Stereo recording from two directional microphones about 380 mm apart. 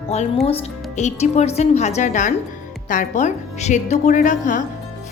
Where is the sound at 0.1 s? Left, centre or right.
Centre.